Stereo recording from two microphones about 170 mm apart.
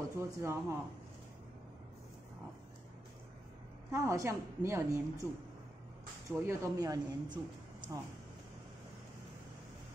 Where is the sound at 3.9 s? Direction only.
15° right (ahead or behind).